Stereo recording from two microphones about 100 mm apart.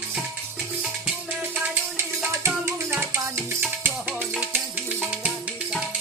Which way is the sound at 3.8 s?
15° right (ahead or behind).